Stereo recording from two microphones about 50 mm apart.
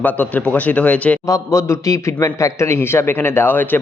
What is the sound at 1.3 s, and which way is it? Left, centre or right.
A man's voice, left.